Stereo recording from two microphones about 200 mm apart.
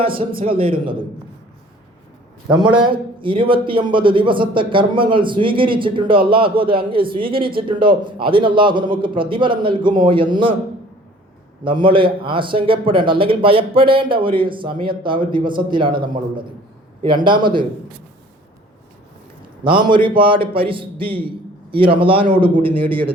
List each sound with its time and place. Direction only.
0.0 s speech: 25° right (ahead or behind)
2.7 s speech: 25° right (ahead or behind)
11.6 s speech: 25° right (ahead or behind)
19.6 s speech: 25° right (ahead or behind)